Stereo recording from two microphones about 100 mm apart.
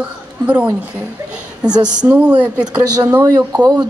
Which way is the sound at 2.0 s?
15° right (ahead or behind).